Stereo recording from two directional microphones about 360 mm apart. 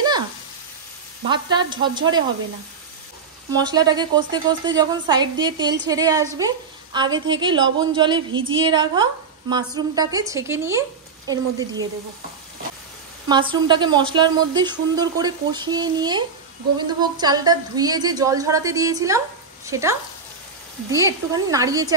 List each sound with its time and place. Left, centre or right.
1.2 s a woman's voice: centre
3.5 s a woman's voice: centre
8.3 s a sound: right
8.5 s a woman's voice: centre
13.3 s a woman's voice: centre